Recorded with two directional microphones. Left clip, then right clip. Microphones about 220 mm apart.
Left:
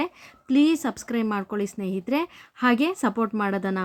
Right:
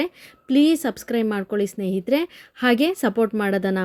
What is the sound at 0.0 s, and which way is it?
Speech, 5° right (ahead or behind).